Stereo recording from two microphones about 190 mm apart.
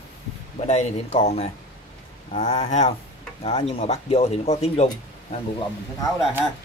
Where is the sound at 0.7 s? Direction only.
35° left (ahead or behind).